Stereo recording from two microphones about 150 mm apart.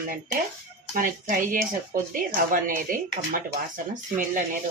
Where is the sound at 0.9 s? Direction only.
60° right (ahead or behind).